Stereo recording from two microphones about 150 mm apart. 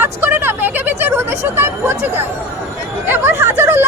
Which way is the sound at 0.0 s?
15° right (ahead or behind).